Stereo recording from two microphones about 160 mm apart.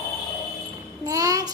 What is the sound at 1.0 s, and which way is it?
Child singing, 20° right (ahead or behind).